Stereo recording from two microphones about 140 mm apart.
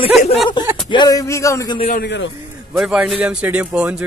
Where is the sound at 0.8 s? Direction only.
30° left (ahead or behind).